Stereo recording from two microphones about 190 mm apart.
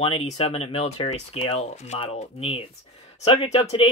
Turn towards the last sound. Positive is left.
turn(degrees=35)  # may be behind; listen again after turning